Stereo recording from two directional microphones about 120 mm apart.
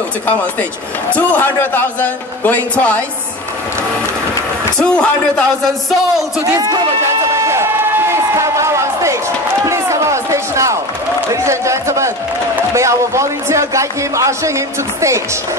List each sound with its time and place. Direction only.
1.1 s a man's voice: 15° left (ahead or behind)
4.7 s a man's voice: 5° left (ahead or behind)
7.3 s a sound: 25° right (ahead or behind)
11.4 s speech: 25° right (ahead or behind)